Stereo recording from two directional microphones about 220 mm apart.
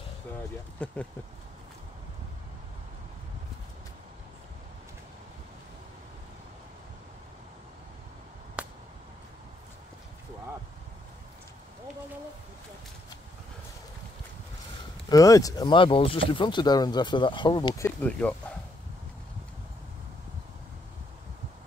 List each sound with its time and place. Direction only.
0.8 s speech: 5° left (ahead or behind)
8.6 s a sound: 5° right (ahead or behind)
15.0 s speech: 15° left (ahead or behind)